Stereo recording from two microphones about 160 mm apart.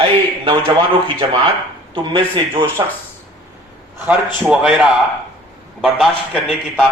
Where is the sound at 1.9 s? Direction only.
30° right (ahead or behind).